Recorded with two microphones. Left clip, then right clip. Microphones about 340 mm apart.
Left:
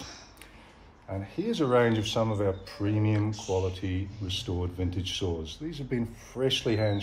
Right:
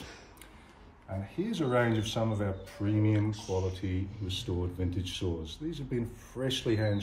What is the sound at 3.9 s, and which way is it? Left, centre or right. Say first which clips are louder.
Speech: left 3 dB; centre.